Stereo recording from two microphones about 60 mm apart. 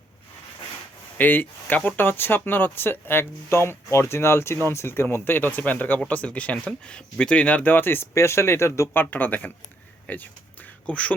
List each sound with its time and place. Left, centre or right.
1.2 s speech: left
3.5 s speech: left
8.9 s speech: left